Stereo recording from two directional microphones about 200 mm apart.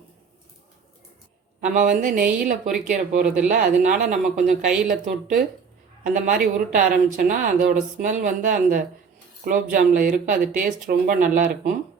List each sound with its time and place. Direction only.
1.6 s a woman's voice: 40° right (ahead or behind)